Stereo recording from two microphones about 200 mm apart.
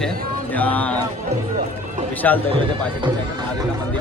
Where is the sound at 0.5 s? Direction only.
10° left (ahead or behind).